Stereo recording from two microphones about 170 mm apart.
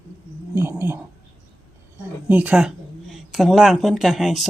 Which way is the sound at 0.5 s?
15° right (ahead or behind).